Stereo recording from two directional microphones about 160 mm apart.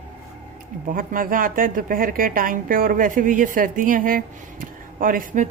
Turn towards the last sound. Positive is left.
turn(degrees=-55)  # may be behind; listen again after turning